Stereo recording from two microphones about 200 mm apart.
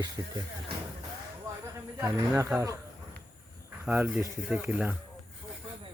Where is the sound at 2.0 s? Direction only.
10° right (ahead or behind).